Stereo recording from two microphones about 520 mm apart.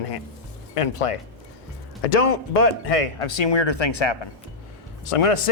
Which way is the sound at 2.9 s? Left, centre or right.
Left.